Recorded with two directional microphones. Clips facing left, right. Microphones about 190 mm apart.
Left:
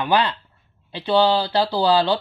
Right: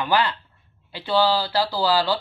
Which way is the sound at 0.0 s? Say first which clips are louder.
Left 2 dB; 15° left (ahead or behind).